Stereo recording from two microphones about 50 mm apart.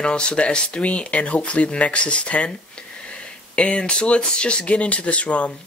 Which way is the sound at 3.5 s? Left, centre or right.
Left.